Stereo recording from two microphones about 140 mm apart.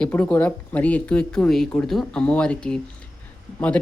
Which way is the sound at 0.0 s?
10° left (ahead or behind).